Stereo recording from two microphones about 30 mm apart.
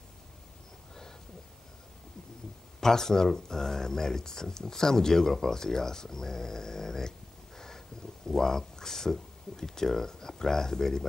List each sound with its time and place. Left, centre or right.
2.8 s speech: centre